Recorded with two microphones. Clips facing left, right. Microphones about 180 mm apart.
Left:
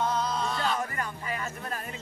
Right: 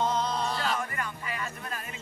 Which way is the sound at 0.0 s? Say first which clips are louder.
Even; 25° right (ahead or behind).